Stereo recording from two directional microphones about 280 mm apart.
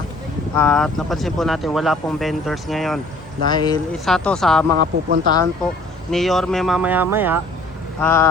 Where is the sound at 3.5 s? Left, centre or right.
Centre.